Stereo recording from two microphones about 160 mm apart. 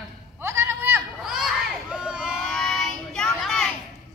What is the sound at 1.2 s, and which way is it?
Child singing, centre (ahead or behind).